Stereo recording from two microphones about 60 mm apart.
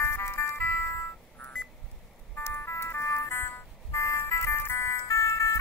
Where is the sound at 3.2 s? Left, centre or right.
Left.